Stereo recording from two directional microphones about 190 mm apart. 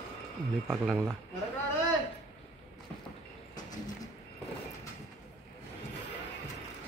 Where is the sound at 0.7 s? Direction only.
Centre (ahead or behind).